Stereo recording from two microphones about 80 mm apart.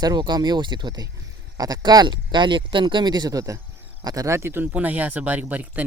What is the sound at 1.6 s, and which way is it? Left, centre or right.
Speech, right.